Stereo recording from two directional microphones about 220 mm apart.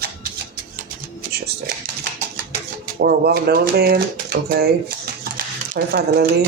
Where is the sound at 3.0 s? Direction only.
45° right (ahead or behind).